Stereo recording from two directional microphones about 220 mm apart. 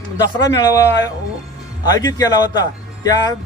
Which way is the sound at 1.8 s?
20° left (ahead or behind).